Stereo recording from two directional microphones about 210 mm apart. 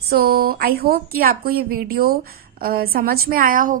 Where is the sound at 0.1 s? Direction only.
45° right (ahead or behind).